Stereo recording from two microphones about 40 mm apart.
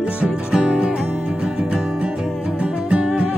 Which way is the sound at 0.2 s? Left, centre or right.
Right.